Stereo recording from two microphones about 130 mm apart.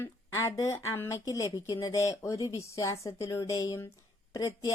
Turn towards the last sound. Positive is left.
turn(degrees=25)  # may be behind; listen again after turning